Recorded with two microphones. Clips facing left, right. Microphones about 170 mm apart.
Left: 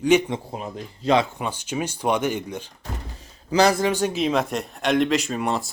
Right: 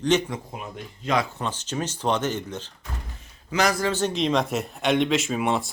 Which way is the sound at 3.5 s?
30° left (ahead or behind).